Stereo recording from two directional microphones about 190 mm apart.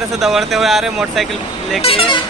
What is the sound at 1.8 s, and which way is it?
Speech, 30° left (ahead or behind).